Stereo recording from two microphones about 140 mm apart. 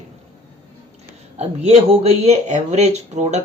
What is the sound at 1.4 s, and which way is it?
Speech, 50° right (ahead or behind).